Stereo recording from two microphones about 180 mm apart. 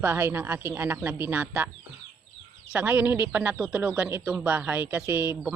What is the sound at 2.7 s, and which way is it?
Speech, 10° right (ahead or behind).